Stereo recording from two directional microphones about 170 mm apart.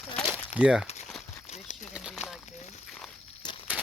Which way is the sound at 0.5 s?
5° right (ahead or behind).